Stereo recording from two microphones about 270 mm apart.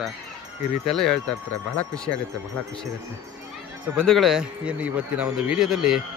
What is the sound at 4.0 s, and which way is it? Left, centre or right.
Speech, centre.